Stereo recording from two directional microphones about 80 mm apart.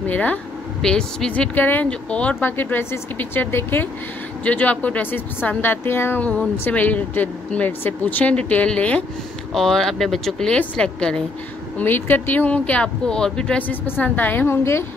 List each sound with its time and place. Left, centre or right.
0.0 s speech: left
0.8 s speech: centre
1.5 s a woman's voice: left
2.5 s a woman's voice: left
9.5 s speech: centre
11.8 s speech: left; by 13.6 s centre
13.6 s a woman's voice: left